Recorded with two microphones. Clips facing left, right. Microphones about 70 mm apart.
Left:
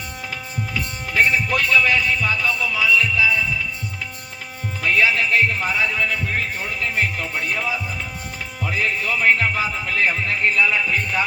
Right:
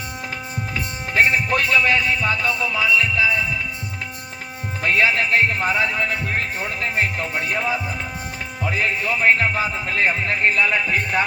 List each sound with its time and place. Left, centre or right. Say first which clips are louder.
1.1 s music: right 1 dB; right
4.8 s music: even; right
8.8 s music: even; right